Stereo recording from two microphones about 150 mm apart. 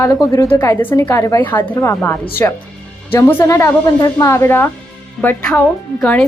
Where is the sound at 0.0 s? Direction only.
20° left (ahead or behind).